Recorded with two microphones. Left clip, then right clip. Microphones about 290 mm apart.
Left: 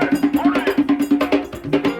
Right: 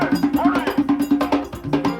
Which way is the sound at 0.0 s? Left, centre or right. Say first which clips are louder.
Left 1 dB; centre.